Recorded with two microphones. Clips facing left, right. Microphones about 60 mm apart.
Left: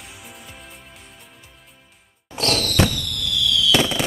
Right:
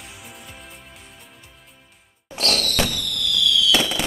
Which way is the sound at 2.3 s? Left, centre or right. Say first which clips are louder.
Left 2 dB; centre.